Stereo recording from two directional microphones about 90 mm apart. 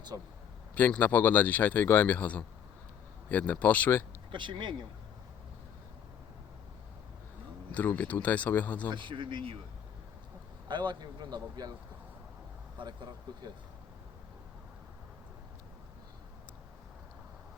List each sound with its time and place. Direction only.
0.1 s speech: 50° right (ahead or behind)
0.8 s speech: 20° left (ahead or behind)
4.3 s speech: 65° right (ahead or behind)
7.7 s speech: 20° left (ahead or behind)
8.9 s speech: 65° right (ahead or behind)
10.7 s speech: 55° right (ahead or behind)
12.8 s speech: 55° right (ahead or behind)